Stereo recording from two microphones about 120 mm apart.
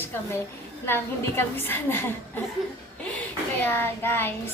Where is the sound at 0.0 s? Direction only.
20° left (ahead or behind).